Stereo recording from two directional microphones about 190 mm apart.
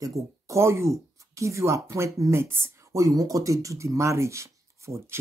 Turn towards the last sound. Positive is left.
turn(degrees=-15)  # may be behind; listen again after turning